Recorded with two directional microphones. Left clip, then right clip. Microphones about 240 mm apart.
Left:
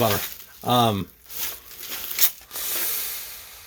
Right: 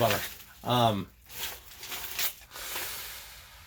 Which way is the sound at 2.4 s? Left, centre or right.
Left.